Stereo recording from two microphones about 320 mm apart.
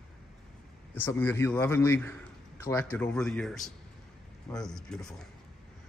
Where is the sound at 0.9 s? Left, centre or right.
Centre.